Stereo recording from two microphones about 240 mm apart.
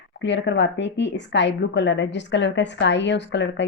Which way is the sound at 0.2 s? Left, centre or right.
Left.